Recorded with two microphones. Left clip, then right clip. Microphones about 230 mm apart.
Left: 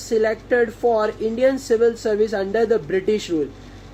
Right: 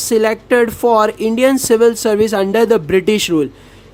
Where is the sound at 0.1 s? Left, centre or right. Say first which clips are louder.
Right 6 dB; right.